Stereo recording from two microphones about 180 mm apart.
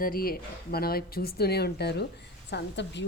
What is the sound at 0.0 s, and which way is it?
A woman's voice, 55° left (ahead or behind).